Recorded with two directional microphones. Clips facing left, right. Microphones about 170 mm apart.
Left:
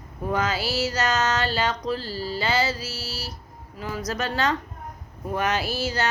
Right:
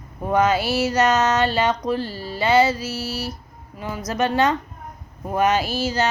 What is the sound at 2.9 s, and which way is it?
Speech, 55° right (ahead or behind).